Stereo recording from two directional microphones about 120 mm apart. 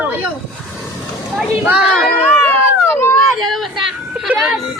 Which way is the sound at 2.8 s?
20° left (ahead or behind).